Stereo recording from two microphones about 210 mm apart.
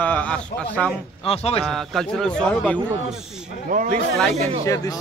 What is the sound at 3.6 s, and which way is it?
Speech, 40° right (ahead or behind).